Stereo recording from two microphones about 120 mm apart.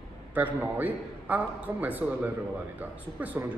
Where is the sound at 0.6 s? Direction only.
15° right (ahead or behind).